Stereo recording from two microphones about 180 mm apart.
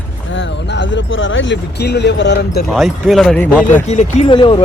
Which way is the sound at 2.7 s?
Centre (ahead or behind).